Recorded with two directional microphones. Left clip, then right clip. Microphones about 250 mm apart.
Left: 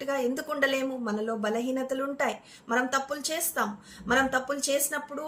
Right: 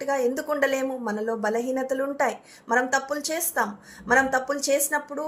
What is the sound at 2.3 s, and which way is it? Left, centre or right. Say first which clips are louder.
A woman's voice: right 4 dB; centre.